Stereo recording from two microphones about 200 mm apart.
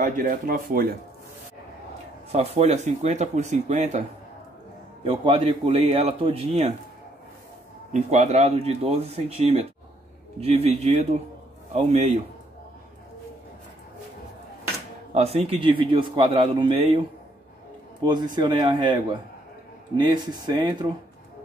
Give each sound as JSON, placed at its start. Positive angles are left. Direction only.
{"t": 0.0, "sound": "speech", "side_deg": -45}
{"t": 2.3, "sound": "speech", "side_deg": -30}
{"t": 5.0, "sound": "a man's voice", "side_deg": -30}
{"t": 7.9, "sound": "speech", "side_deg": -35}
{"t": 15.1, "sound": "a man's voice", "side_deg": -30}
{"t": 18.0, "sound": "a man's voice", "side_deg": -20}
{"t": 20.0, "sound": "a man's voice", "side_deg": -20}